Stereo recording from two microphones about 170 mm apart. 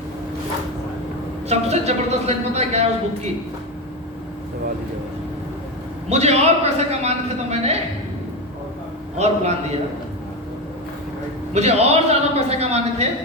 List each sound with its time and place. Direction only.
1.5 s a man's voice: 40° right (ahead or behind)
6.1 s a man's voice: 40° right (ahead or behind)
9.1 s a man's voice: 40° right (ahead or behind)
11.5 s a man's voice: 40° right (ahead or behind)